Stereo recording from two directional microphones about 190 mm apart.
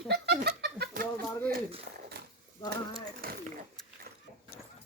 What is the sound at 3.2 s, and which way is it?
Speech, 50° right (ahead or behind).